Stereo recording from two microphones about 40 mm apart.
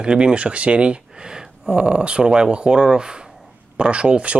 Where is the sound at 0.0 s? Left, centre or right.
Right.